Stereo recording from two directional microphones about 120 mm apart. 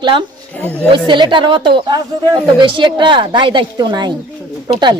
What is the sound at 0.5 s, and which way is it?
Speech, 15° left (ahead or behind).